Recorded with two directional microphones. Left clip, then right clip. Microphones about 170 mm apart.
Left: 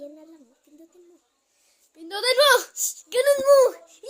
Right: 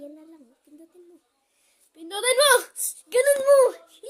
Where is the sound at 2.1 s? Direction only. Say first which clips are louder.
Left 1 dB; 25° right (ahead or behind).